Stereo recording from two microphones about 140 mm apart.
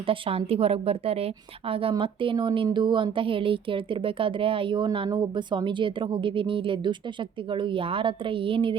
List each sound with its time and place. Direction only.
0.1 s a woman's voice: 45° right (ahead or behind)